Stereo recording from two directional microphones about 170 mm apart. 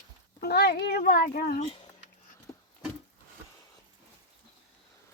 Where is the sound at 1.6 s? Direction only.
30° left (ahead or behind).